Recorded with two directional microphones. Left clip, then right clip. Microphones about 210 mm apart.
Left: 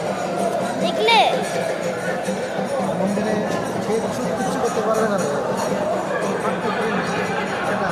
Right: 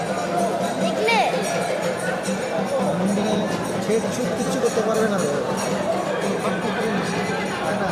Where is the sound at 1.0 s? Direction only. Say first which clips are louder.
Left 5 dB; 10° left (ahead or behind).